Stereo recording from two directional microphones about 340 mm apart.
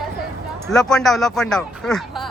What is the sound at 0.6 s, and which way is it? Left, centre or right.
Speech, centre.